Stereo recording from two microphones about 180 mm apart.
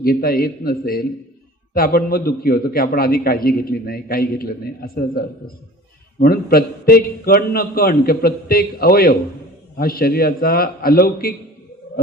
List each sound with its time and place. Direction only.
0.0 s a man's voice: 55° left (ahead or behind)